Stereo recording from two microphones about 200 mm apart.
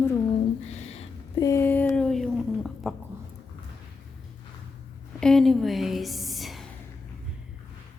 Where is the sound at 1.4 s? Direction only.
15° left (ahead or behind).